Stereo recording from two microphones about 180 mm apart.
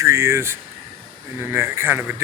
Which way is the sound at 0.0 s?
15° right (ahead or behind).